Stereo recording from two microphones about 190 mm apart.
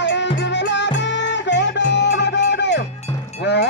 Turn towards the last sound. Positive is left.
turn(degrees=65)  # may be behind; listen again after turning